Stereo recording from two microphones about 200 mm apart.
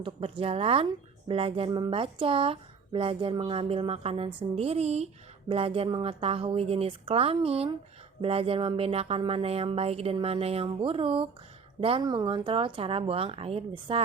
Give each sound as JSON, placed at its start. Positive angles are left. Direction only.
{"t": 0.0, "sound": "speech", "side_deg": -25}